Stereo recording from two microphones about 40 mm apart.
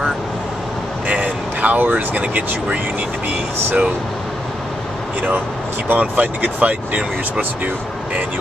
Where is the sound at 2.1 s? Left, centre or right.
Right.